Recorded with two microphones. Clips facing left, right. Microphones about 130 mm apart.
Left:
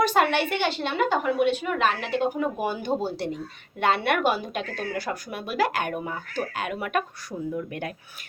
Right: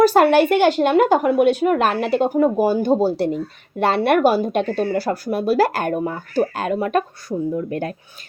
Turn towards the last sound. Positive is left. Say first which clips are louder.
# right 7 dB
turn(degrees=-35)  # may be behind; listen again after turning